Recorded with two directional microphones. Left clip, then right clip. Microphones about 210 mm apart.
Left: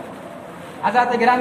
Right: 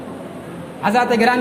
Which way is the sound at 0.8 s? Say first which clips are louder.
Right 1 dB; 55° right (ahead or behind).